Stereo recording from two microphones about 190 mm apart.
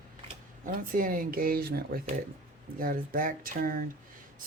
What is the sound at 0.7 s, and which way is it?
Speech, 50° right (ahead or behind).